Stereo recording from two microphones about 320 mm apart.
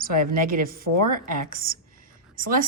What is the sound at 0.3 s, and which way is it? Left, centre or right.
A woman's voice, right.